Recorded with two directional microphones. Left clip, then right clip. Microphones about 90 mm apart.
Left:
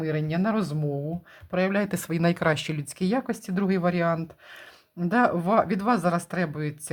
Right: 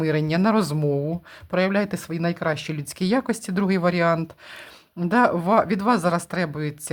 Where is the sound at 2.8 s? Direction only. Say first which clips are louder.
Right 4 dB; 20° right (ahead or behind).